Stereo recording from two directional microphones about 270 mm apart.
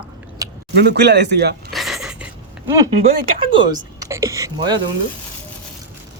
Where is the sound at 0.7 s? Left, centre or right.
Right.